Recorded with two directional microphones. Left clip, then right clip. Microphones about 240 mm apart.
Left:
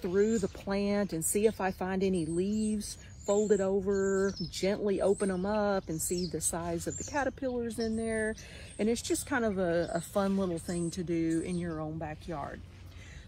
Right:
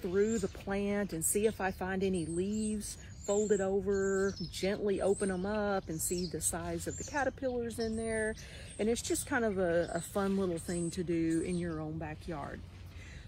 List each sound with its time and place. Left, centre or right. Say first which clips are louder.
0.1 s speech: left 3 dB; centre
5.4 s speech: left 4 dB; left
5.8 s speech: left 3 dB; centre